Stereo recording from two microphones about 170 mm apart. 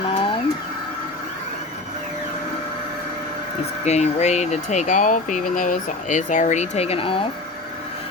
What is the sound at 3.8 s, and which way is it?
Speech, 40° left (ahead or behind).